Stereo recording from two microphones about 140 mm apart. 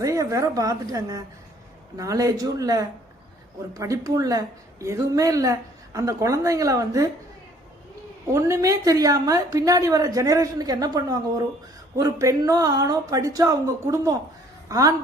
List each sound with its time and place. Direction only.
0.0 s a woman's voice: 25° right (ahead or behind)
8.3 s a woman's voice: 20° right (ahead or behind)